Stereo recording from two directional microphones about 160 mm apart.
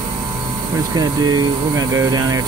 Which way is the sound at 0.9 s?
25° right (ahead or behind).